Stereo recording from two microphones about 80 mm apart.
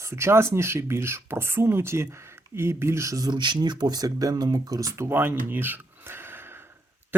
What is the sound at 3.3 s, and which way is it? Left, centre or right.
Speech, right.